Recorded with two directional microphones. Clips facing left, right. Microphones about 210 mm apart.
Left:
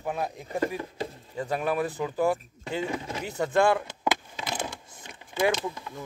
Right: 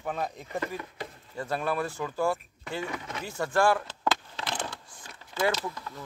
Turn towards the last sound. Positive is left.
turn(degrees=15)  # may be behind; listen again after turning